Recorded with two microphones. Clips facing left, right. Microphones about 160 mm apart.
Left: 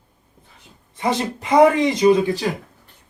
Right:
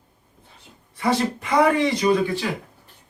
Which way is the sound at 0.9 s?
20° left (ahead or behind).